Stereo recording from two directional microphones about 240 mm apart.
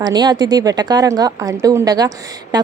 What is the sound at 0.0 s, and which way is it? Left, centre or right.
A woman's voice, centre.